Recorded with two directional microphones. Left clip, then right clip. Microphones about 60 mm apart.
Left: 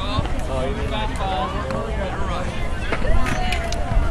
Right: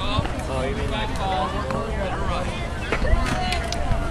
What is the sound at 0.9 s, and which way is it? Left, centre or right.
Run, left.